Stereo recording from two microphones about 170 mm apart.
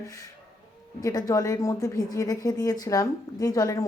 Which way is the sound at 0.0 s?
20° left (ahead or behind).